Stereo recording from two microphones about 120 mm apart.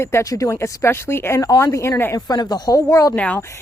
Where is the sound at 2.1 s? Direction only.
30° left (ahead or behind).